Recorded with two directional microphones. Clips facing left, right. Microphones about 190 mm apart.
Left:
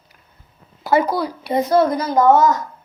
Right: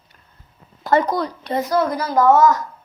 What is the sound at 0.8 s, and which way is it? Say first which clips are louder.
Speech: left 1 dB; 5° left (ahead or behind).